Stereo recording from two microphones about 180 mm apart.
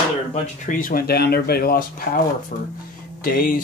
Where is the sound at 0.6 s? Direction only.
50° left (ahead or behind).